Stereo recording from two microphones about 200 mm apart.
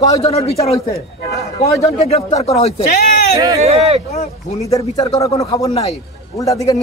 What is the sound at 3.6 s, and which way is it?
Speech, 30° right (ahead or behind).